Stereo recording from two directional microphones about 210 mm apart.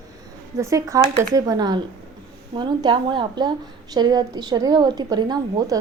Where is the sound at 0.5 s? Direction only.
15° right (ahead or behind).